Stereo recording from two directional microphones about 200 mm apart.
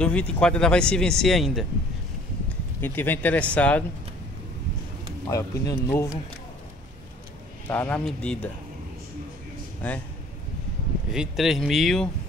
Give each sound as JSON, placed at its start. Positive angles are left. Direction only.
{"t": 0.0, "sound": "speech", "side_deg": 5}
{"t": 2.8, "sound": "speech", "side_deg": 10}
{"t": 5.3, "sound": "speech", "side_deg": 15}
{"t": 7.6, "sound": "speech", "side_deg": 10}
{"t": 11.1, "sound": "speech", "side_deg": 0}